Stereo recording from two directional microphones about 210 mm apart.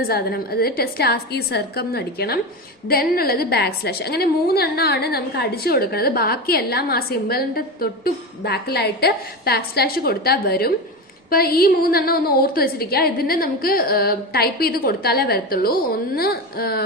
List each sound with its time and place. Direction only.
0.0 s a woman's voice: 45° left (ahead or behind)